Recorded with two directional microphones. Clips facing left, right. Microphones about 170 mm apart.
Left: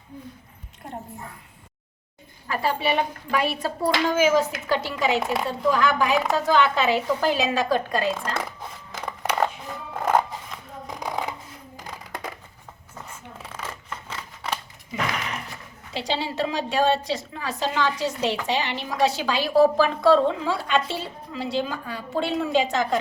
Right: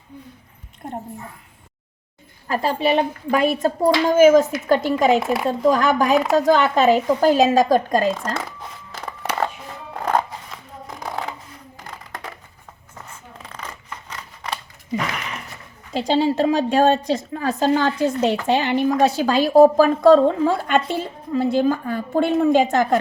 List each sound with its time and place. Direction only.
2.5 s a woman's voice: 40° right (ahead or behind)
5.2 s speech: centre (ahead or behind)
5.5 s a woman's voice: 45° right (ahead or behind)
9.0 s a sound: 5° right (ahead or behind)
13.4 s scissors: 5° left (ahead or behind)
15.9 s a woman's voice: 45° right (ahead or behind)